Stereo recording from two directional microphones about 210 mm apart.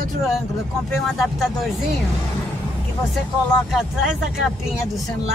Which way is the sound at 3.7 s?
Centre (ahead or behind).